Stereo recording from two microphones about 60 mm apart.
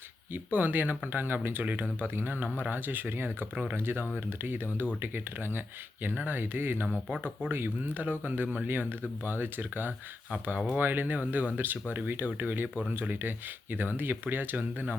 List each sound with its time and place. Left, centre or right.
0.5 s speech: right